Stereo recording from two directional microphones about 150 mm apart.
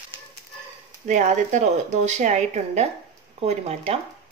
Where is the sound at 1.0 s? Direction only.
55° right (ahead or behind).